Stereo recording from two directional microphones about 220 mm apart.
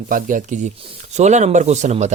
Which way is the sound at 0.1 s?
35° right (ahead or behind).